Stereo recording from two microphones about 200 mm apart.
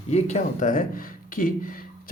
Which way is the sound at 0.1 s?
35° left (ahead or behind).